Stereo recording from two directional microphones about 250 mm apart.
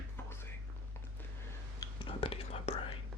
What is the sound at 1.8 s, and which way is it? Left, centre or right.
Whispering, left.